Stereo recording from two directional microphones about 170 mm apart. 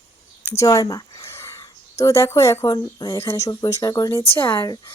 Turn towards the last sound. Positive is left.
turn(degrees=15)  # may be behind; listen again after turning